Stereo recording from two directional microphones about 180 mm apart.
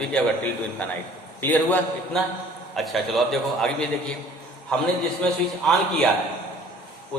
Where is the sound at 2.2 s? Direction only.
Centre (ahead or behind).